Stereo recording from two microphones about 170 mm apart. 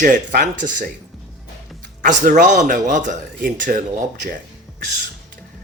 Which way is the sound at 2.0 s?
50° right (ahead or behind).